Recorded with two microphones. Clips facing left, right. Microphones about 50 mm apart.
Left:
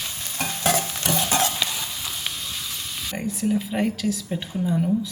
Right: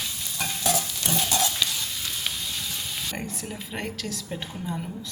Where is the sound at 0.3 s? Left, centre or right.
Left.